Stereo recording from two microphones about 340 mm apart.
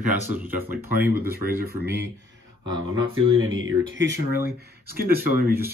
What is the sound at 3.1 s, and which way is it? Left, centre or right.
Speech, right.